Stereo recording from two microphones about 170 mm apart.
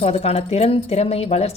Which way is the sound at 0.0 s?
35° left (ahead or behind).